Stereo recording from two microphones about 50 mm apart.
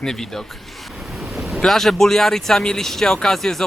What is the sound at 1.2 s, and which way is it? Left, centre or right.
Wind noise, centre.